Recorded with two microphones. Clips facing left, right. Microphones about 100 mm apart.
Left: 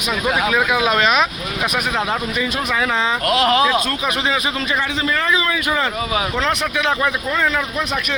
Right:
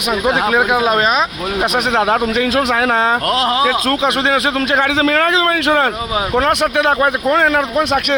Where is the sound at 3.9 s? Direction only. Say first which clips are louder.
Right 6 dB; 65° right (ahead or behind).